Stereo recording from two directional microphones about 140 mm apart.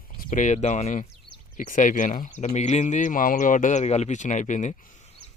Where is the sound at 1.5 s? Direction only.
70° left (ahead or behind).